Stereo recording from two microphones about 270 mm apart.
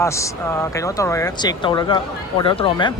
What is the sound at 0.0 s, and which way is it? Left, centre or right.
Speech, centre.